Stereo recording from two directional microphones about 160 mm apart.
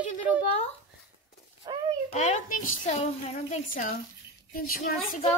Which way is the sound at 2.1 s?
45° left (ahead or behind).